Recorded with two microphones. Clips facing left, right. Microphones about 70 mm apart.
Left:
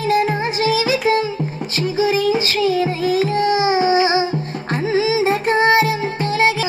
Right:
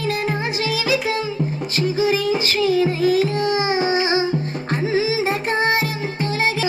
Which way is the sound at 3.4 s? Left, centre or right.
Right.